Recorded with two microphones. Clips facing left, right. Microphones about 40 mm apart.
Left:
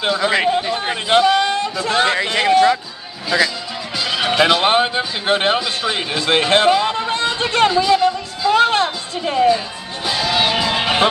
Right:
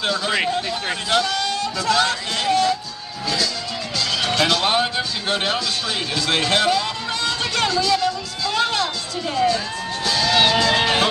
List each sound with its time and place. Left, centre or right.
0.5 s a man's voice: centre; by 2.7 s left
4.0 s speech: centre
10.0 s music: centre